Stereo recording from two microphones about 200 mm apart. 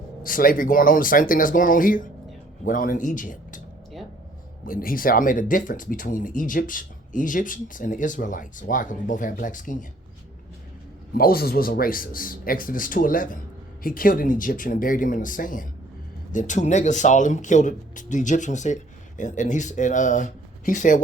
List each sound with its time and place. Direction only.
0.3 s a man's voice: 45° left (ahead or behind)
4.6 s speech: 45° left (ahead or behind)
11.1 s a man's voice: 50° left (ahead or behind)